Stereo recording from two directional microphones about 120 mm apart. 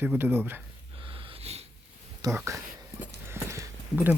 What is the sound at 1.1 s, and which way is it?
Wheeze, 50° right (ahead or behind).